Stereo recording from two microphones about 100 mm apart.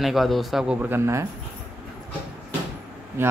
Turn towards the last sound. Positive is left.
turn(degrees=-20)  # may be behind; listen again after turning